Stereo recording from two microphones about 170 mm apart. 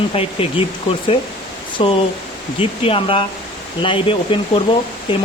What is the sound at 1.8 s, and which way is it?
Speech, 30° left (ahead or behind).